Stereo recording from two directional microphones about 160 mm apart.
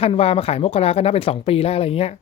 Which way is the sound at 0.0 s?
40° left (ahead or behind).